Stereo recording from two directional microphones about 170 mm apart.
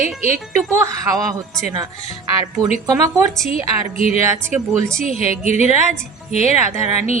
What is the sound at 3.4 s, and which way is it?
Speech, 50° right (ahead or behind).